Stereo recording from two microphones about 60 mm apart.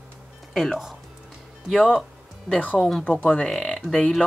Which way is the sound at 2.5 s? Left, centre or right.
Left.